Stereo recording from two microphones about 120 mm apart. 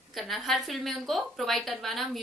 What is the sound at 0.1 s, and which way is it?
A woman's voice, centre (ahead or behind).